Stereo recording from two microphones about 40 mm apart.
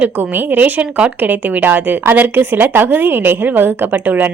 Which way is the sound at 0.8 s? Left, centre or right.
Right.